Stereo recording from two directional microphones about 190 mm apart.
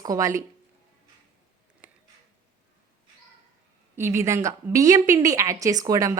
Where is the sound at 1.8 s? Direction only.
10° right (ahead or behind).